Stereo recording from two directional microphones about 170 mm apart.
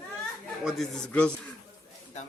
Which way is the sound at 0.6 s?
Centre (ahead or behind).